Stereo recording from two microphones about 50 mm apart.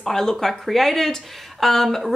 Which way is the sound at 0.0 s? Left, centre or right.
Centre.